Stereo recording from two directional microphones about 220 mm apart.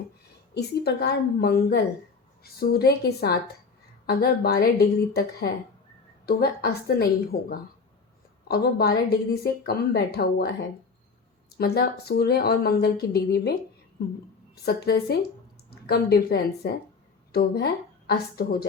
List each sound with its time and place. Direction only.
0.5 s a woman's voice: 50° left (ahead or behind)
11.5 s a woman's voice: 45° left (ahead or behind)